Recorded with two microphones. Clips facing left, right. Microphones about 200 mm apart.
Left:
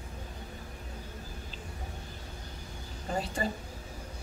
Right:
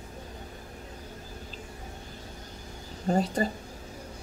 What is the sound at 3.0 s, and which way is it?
Speech, 40° right (ahead or behind).